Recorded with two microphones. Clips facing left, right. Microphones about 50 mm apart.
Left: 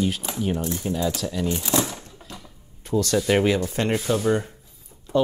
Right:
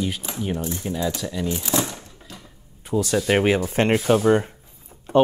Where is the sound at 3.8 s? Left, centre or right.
Right.